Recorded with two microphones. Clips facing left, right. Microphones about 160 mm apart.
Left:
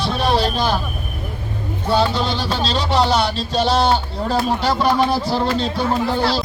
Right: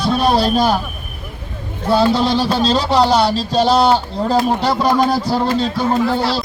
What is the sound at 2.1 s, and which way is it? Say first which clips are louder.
Music: right 6 dB; 35° right (ahead or behind).